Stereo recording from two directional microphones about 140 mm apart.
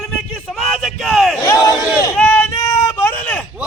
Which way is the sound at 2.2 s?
10° left (ahead or behind).